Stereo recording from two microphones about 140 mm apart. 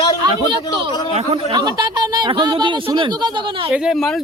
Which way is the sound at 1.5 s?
30° right (ahead or behind).